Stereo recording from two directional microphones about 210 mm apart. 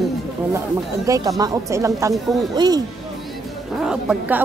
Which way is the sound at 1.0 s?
15° right (ahead or behind).